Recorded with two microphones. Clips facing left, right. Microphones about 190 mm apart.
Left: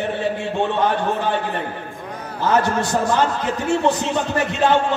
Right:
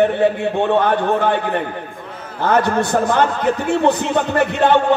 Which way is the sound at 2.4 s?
60° right (ahead or behind).